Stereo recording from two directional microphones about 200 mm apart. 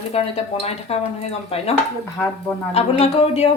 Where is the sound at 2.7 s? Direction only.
30° left (ahead or behind).